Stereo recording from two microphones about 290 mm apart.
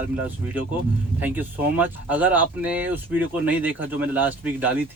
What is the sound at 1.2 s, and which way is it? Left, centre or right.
Speech, centre.